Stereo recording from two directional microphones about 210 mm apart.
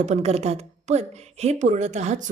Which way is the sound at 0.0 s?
30° right (ahead or behind).